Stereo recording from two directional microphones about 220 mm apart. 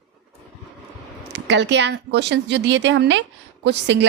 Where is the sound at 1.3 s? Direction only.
50° right (ahead or behind).